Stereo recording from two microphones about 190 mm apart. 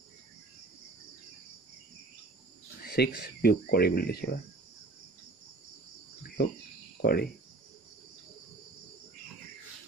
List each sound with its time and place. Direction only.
2.8 s speech: 60° left (ahead or behind)
6.2 s cricket: 55° left (ahead or behind)
7.0 s speech: 55° left (ahead or behind)